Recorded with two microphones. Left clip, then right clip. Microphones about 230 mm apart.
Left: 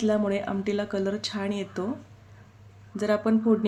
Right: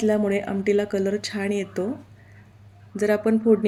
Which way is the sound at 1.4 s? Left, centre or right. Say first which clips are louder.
Right 5 dB; left.